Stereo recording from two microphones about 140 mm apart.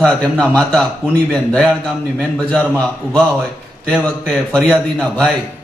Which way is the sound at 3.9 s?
10° left (ahead or behind).